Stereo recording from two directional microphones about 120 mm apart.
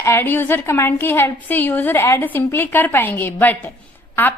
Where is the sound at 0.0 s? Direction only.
20° left (ahead or behind).